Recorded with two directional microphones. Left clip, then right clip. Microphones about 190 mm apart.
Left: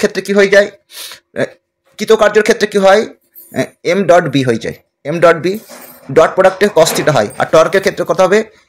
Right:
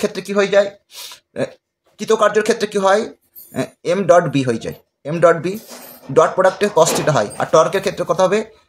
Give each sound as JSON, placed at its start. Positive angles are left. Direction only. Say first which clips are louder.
{"t": 0.0, "sound": "speech", "louder": "left 7 dB", "side_deg": 30}